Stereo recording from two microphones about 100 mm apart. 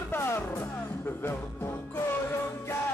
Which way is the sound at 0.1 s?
20° left (ahead or behind).